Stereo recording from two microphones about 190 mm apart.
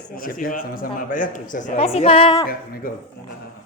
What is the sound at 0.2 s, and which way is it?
Speech, 50° left (ahead or behind).